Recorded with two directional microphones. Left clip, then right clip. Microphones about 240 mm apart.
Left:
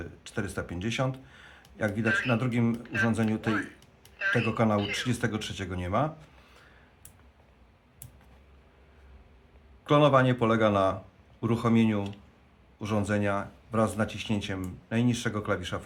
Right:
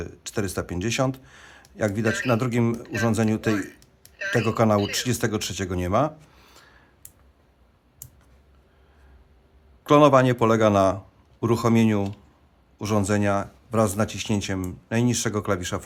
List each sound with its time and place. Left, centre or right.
0.0 s speech: right
9.8 s speech: right